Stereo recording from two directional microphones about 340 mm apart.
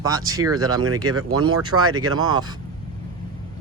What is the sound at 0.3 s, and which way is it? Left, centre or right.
Speech, centre.